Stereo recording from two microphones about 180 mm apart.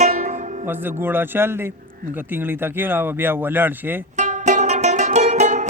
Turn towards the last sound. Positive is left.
turn(degrees=-40)  # may be behind; listen again after turning